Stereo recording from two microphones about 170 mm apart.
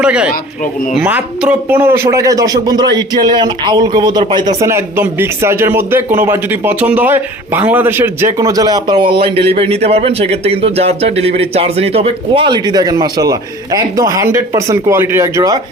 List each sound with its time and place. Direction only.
0.0 s a man's voice: 5° right (ahead or behind)